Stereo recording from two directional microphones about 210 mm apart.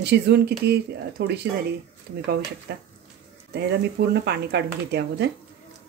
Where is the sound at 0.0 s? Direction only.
50° right (ahead or behind).